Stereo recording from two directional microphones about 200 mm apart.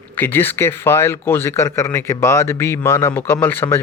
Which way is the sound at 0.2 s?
10° left (ahead or behind).